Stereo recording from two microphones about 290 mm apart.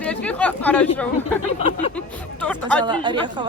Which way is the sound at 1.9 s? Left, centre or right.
Centre.